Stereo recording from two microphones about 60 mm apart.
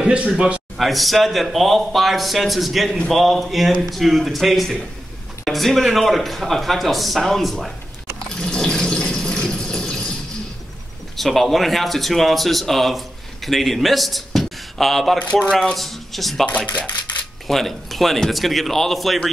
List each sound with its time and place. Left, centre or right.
0.1 s a man's voice: centre
0.7 s a man's voice: centre
8.4 s water: centre
11.1 s speech: centre
15.1 s speech: left
15.5 s a man's voice: centre
16.4 s speech: left
17.5 s a man's voice: centre